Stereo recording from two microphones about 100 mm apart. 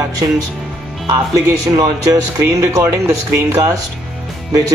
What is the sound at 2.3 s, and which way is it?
Speech, 30° right (ahead or behind).